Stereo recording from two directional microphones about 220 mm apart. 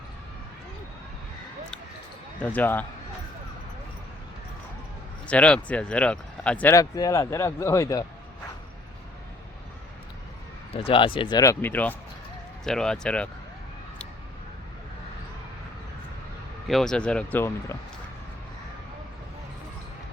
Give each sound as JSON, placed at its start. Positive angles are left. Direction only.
{"t": 2.4, "sound": "speech", "side_deg": 5}
{"t": 5.3, "sound": "speech", "side_deg": 5}
{"t": 10.8, "sound": "speech", "side_deg": 25}
{"t": 16.6, "sound": "speech", "side_deg": 0}